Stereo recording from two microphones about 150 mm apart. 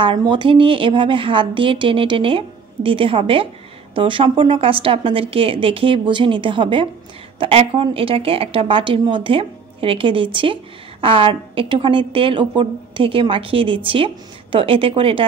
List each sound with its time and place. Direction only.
0.0 s a woman's voice: 35° right (ahead or behind)